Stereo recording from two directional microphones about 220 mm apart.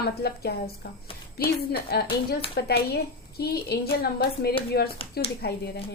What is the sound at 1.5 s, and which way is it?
A woman's voice, 45° left (ahead or behind).